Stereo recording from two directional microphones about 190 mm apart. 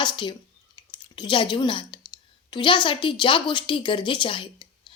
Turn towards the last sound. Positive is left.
turn(degrees=25)  # may be behind; listen again after turning